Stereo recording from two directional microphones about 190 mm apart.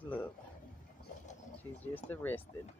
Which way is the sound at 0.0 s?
10° left (ahead or behind).